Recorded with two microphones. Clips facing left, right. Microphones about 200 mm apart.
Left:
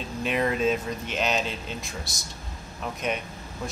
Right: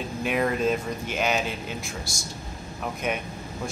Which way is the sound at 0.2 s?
5° right (ahead or behind).